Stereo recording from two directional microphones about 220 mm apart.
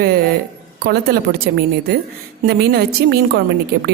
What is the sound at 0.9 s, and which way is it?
A woman's voice, 45° right (ahead or behind).